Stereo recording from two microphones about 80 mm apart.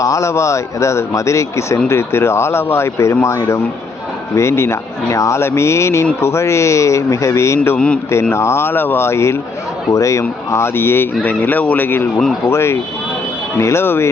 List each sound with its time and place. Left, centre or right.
0.0 s speech: left